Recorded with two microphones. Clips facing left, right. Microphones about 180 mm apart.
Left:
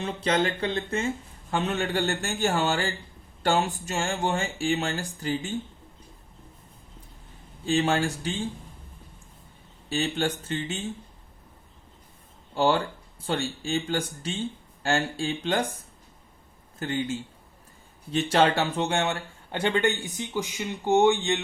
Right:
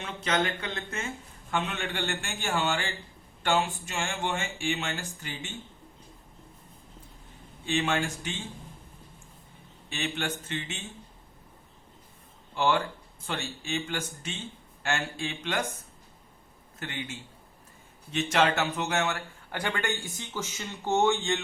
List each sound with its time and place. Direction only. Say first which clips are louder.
0.0 s speech: left 4 dB; 30° left (ahead or behind)
7.6 s speech: left 4 dB; 35° left (ahead or behind)
9.9 s speech: left 6 dB; 35° left (ahead or behind)
12.5 s speech: left 3 dB; 35° left (ahead or behind)
16.8 s speech: left 9 dB; 35° left (ahead or behind)